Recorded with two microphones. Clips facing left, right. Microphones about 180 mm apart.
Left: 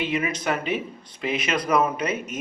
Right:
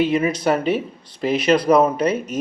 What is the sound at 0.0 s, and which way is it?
Speech, 35° right (ahead or behind).